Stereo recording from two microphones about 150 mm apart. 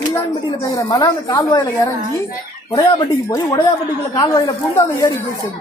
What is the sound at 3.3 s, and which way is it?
A woman's voice, 20° left (ahead or behind).